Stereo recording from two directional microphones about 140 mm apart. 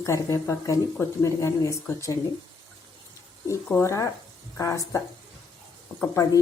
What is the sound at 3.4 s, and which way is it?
Speech, 20° left (ahead or behind).